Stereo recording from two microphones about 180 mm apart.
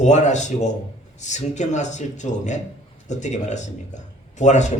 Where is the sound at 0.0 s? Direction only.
40° left (ahead or behind).